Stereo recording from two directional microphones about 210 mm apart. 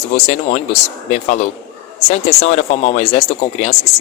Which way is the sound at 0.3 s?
35° left (ahead or behind).